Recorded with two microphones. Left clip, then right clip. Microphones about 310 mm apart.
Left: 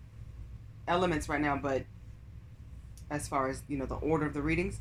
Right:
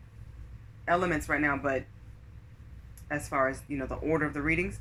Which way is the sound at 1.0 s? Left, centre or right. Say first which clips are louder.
Right 3 dB; centre.